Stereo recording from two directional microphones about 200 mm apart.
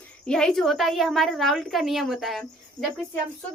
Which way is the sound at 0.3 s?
5° left (ahead or behind).